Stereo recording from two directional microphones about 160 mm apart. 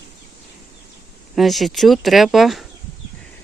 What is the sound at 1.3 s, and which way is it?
Speech, centre (ahead or behind).